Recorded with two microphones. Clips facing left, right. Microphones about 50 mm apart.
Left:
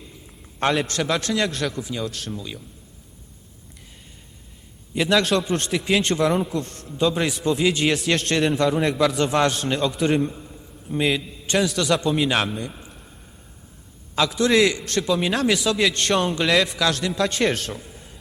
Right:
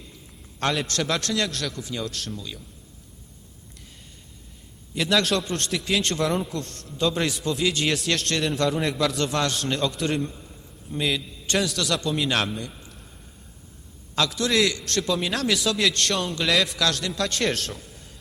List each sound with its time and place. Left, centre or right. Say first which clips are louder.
0.6 s a man's voice: left 4 dB; centre
2.3 s a man's voice: left 3 dB; left
5.0 s a man's voice: left 3 dB; centre
5.5 s a man's voice: left 4 dB; centre
9.1 s a man's voice: left 5 dB; left
11.5 s a man's voice: left 4 dB; centre
12.9 s a sound: left 2 dB; centre
14.2 s a man's voice: left 4 dB; centre
15.5 s a man's voice: left 2 dB; centre
17.8 s a sound: left 3 dB; left